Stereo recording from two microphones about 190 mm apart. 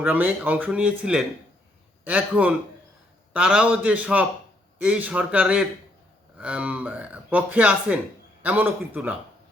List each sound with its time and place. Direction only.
0.0 s speech: 10° right (ahead or behind)